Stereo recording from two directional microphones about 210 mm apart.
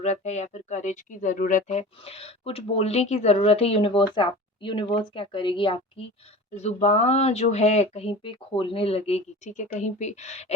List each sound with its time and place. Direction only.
0.0 s speech: 35° left (ahead or behind)